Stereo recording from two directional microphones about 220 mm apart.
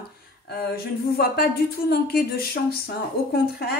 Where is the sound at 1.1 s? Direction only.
45° left (ahead or behind).